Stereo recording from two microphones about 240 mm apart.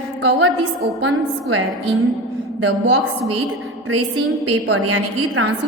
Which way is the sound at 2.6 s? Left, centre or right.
Right.